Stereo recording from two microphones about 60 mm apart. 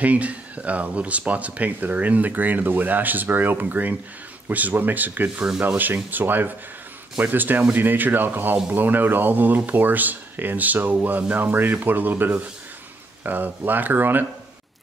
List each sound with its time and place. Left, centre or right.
0.0 s speech: right